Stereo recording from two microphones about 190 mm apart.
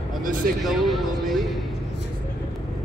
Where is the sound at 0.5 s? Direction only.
Centre (ahead or behind).